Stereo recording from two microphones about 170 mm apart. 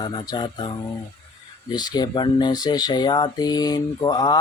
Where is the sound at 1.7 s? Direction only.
25° left (ahead or behind).